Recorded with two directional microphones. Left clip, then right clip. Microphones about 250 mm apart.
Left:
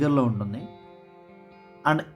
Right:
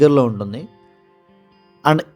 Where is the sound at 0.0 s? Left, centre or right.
Right.